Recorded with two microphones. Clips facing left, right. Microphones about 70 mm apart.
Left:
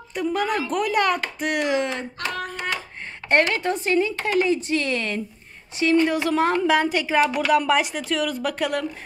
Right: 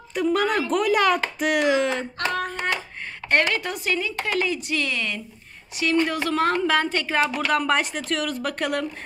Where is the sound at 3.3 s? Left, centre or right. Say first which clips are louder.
Left 2 dB; left.